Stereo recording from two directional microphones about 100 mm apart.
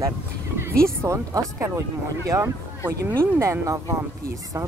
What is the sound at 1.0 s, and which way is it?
Speech, 30° right (ahead or behind).